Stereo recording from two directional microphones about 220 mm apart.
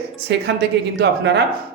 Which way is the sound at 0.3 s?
50° right (ahead or behind).